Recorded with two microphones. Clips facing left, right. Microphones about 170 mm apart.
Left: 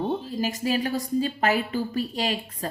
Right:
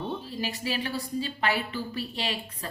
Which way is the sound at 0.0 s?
45° left (ahead or behind).